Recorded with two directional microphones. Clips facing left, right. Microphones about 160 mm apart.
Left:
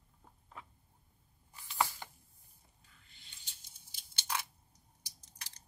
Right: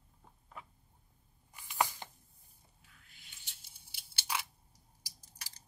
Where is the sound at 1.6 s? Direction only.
15° right (ahead or behind).